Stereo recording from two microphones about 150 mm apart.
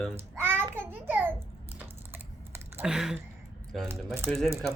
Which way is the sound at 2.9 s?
5° right (ahead or behind).